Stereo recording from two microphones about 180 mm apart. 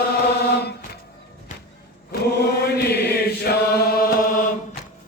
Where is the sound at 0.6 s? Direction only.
65° left (ahead or behind).